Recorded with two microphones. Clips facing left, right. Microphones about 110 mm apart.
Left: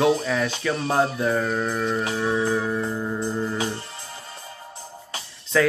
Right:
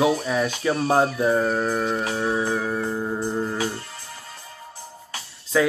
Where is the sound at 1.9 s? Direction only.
30° right (ahead or behind).